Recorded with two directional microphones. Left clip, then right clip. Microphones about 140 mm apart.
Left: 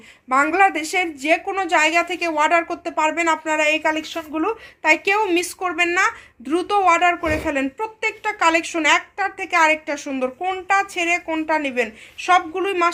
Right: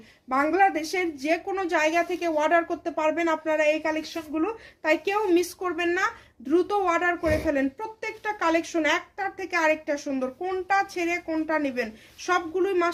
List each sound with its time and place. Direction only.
0.3 s a woman's voice: 30° left (ahead or behind)
4.1 s a woman's voice: 45° left (ahead or behind)
7.6 s a woman's voice: 25° left (ahead or behind)
11.7 s a woman's voice: 40° left (ahead or behind)